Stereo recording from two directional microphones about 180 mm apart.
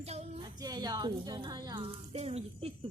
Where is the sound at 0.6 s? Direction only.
20° right (ahead or behind).